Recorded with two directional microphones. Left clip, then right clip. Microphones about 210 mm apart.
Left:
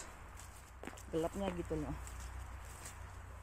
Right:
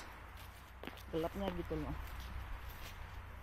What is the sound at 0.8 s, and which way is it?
Speech, 15° left (ahead or behind).